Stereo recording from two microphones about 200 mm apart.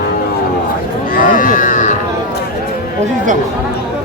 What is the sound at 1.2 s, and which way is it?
Speech, 45° left (ahead or behind).